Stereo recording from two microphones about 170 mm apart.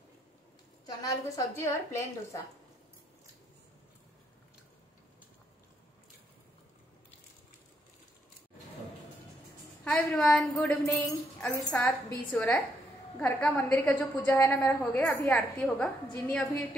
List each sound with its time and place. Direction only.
0.8 s a woman's voice: 20° left (ahead or behind)
9.8 s a woman's voice: 5° left (ahead or behind)